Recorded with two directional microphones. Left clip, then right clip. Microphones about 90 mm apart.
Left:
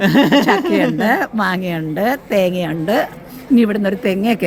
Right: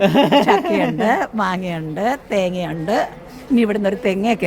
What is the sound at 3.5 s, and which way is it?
Speech, 35° right (ahead or behind).